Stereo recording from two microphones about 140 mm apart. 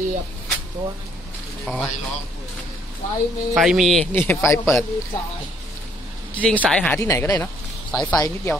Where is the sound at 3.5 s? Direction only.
Centre (ahead or behind).